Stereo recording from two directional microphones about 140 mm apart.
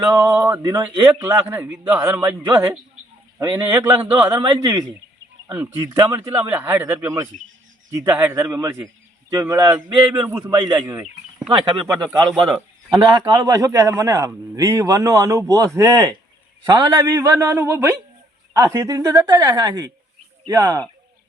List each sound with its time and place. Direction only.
0.0 s a man's voice: 20° right (ahead or behind)
1.2 s speech: 15° right (ahead or behind)
4.2 s a man's voice: 30° right (ahead or behind)
6.3 s a man's voice: 15° right (ahead or behind)
10.4 s a man's voice: 30° right (ahead or behind)
11.4 s a man's voice: 40° right (ahead or behind); by 20.8 s 20° right (ahead or behind)